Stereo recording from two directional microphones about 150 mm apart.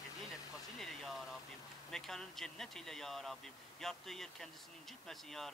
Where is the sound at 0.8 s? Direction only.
Centre (ahead or behind).